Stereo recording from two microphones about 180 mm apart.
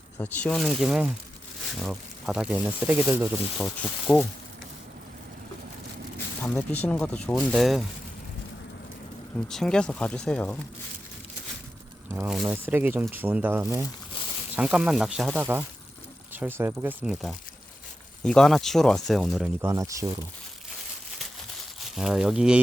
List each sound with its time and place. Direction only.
0.2 s speech: 5° left (ahead or behind); by 3.2 s 15° right (ahead or behind)
3.6 s speech: 5° left (ahead or behind)
6.4 s speech: 5° left (ahead or behind)
9.5 s speech: 5° left (ahead or behind)
12.1 s speech: 10° right (ahead or behind)
19.6 s speech: 15° right (ahead or behind)
21.8 s speech: 5° right (ahead or behind)